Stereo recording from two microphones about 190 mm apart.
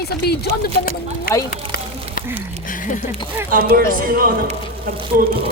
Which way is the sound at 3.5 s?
50° right (ahead or behind).